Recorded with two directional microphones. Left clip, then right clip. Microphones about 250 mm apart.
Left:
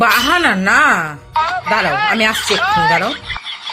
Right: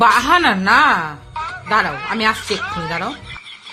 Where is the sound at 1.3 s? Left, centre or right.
Left.